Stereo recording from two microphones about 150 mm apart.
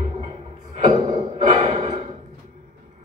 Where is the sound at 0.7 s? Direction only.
40° right (ahead or behind).